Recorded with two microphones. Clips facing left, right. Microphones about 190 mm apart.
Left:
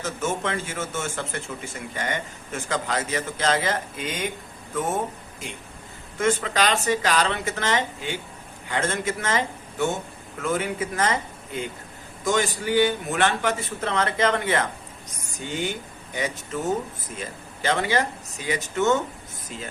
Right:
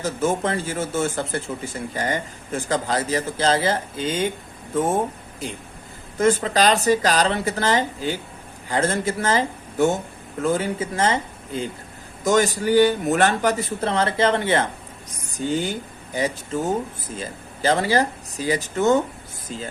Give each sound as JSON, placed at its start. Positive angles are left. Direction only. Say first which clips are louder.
{"t": 0.0, "sound": "speech", "louder": "right 5 dB", "side_deg": -35}
{"t": 12.2, "sound": "speech", "louder": "right 5 dB", "side_deg": -40}